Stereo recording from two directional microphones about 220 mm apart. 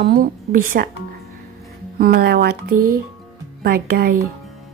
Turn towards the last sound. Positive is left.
turn(degrees=-40)  # may be behind; listen again after turning